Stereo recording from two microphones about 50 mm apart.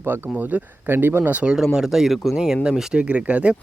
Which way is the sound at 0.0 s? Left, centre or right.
Right.